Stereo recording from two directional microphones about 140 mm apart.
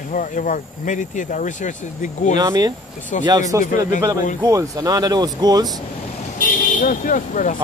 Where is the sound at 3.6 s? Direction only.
75° left (ahead or behind).